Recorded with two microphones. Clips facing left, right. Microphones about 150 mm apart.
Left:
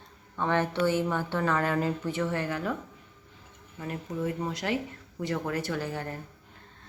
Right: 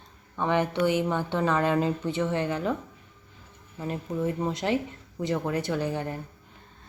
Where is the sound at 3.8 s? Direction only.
25° right (ahead or behind).